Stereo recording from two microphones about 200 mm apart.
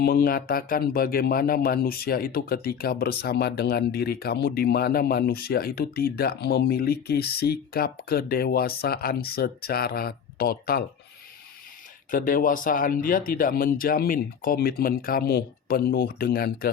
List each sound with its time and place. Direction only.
0.0 s speech: 50° left (ahead or behind)
12.1 s speech: 45° left (ahead or behind)